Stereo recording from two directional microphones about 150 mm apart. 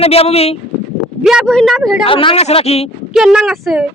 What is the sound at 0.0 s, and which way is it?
Speech, 40° left (ahead or behind).